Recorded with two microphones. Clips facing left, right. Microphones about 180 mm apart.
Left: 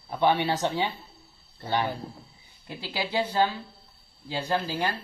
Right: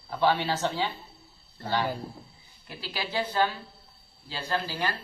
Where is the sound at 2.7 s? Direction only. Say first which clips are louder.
Left 3 dB; 20° left (ahead or behind).